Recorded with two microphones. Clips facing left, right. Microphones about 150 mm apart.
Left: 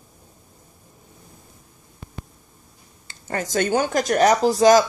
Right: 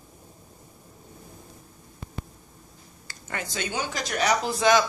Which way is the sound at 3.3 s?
45° left (ahead or behind).